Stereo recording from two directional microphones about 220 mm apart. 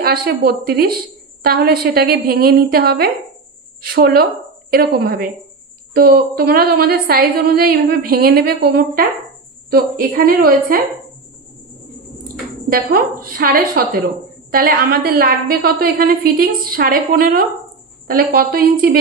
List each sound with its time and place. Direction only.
0.0 s a woman's voice: 45° right (ahead or behind)
12.3 s a sound: 40° right (ahead or behind)
13.2 s a woman's voice: 40° right (ahead or behind)